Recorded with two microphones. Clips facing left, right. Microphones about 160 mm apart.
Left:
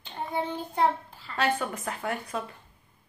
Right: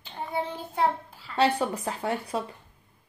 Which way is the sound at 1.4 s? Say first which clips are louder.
Right 4 dB; 35° right (ahead or behind).